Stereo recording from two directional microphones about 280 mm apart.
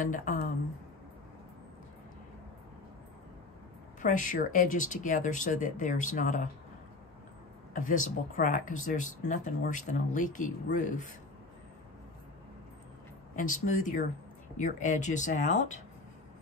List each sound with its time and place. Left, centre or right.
0.0 s speech: left
4.0 s speech: left
7.7 s speech: left
13.4 s speech: left